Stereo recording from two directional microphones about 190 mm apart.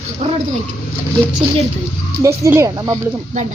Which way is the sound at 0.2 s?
35° right (ahead or behind).